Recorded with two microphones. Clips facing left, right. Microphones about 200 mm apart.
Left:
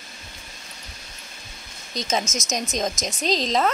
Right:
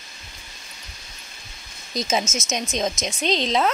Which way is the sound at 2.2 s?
15° left (ahead or behind).